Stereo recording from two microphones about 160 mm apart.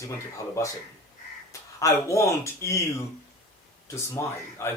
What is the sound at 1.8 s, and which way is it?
Speech, 20° left (ahead or behind).